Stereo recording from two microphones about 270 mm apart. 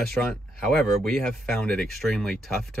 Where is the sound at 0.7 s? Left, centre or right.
Centre.